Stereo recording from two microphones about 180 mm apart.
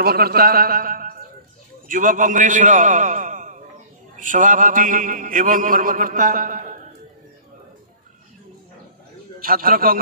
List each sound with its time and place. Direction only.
0.0 s a man's voice: 60° right (ahead or behind)
9.4 s a man's voice: 55° right (ahead or behind)